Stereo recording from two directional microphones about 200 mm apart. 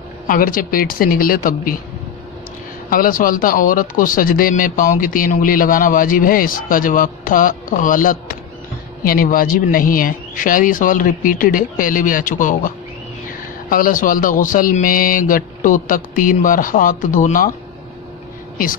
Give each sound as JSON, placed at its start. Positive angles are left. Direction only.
{"t": 0.3, "sound": "speech", "side_deg": 45}
{"t": 2.9, "sound": "speech", "side_deg": 45}